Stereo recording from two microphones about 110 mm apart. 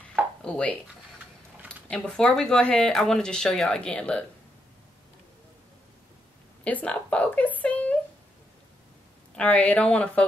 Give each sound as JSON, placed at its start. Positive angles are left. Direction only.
{"t": 0.4, "sound": "a sound", "side_deg": 10}
{"t": 1.9, "sound": "speech", "side_deg": 10}
{"t": 6.6, "sound": "a woman's voice", "side_deg": 10}
{"t": 9.3, "sound": "speech", "side_deg": 10}